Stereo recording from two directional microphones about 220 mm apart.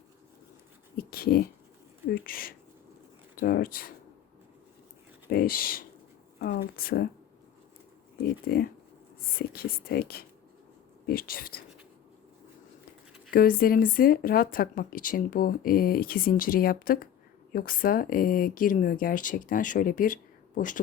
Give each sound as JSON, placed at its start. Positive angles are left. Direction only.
{"t": 0.9, "sound": "speech", "side_deg": 45}
{"t": 5.3, "sound": "speech", "side_deg": 45}
{"t": 8.4, "sound": "speech", "side_deg": 45}
{"t": 13.3, "sound": "speech", "side_deg": 40}